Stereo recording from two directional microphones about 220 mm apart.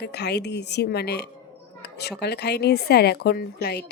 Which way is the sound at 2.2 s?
50° left (ahead or behind).